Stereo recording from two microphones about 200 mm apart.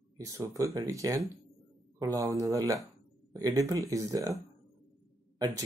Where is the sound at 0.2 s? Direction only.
15° right (ahead or behind).